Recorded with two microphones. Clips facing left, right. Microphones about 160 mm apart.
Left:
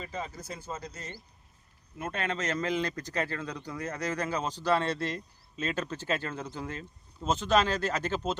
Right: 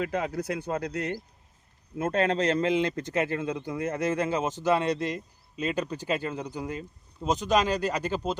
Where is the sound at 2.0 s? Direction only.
40° right (ahead or behind).